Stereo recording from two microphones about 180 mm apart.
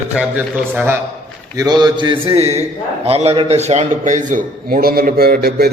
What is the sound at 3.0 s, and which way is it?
A man's voice, 35° right (ahead or behind).